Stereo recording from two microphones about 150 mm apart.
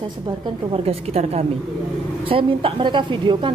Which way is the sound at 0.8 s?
45° right (ahead or behind).